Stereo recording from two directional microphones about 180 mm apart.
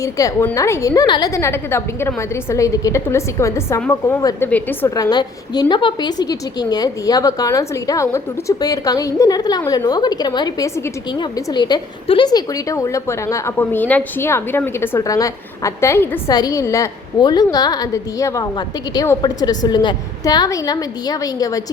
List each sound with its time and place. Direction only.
0.0 s a woman's voice: 20° left (ahead or behind)
4.9 s a woman's voice: 20° left (ahead or behind)